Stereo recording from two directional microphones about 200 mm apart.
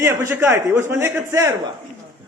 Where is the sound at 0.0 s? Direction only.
10° right (ahead or behind).